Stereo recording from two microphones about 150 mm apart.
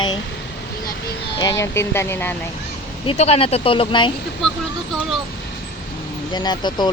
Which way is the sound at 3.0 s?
45° left (ahead or behind).